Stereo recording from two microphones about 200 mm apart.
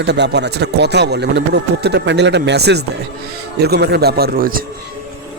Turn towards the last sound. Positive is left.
turn(degrees=-45)  # may be behind; listen again after turning